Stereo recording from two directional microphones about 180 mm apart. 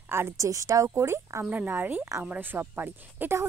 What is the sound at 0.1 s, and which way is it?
Speech, 15° right (ahead or behind).